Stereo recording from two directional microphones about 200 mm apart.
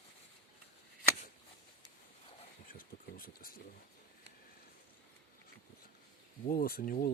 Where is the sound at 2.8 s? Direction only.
45° left (ahead or behind).